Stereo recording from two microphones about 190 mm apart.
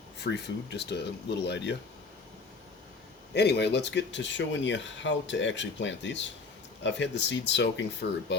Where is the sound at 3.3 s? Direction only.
60° left (ahead or behind).